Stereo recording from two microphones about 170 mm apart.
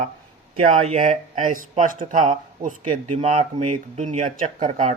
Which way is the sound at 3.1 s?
40° right (ahead or behind).